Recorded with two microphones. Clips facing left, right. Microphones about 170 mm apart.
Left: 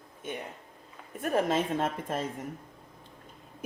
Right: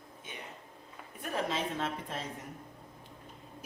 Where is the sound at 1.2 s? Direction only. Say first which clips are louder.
Left 7 dB; 50° left (ahead or behind).